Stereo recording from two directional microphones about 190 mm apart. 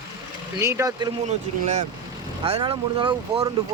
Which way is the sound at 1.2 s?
35° right (ahead or behind).